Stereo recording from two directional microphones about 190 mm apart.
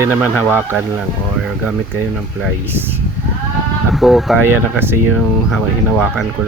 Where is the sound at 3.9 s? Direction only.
Centre (ahead or behind).